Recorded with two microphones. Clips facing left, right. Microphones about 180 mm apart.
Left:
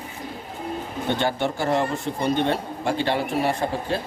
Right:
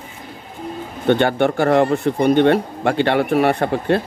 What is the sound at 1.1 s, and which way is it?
Speech, 60° right (ahead or behind).